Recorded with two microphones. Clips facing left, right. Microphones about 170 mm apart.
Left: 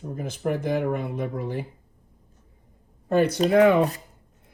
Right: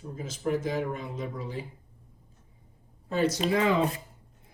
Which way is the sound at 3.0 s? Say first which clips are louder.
Left 6 dB; 60° left (ahead or behind).